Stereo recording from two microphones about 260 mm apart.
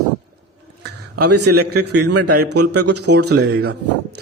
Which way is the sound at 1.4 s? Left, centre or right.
Right.